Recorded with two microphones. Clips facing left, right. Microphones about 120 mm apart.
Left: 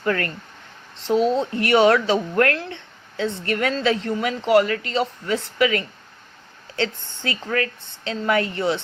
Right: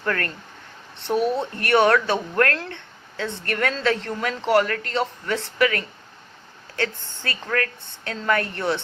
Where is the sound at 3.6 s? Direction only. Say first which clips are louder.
Left 1 dB; 10° left (ahead or behind).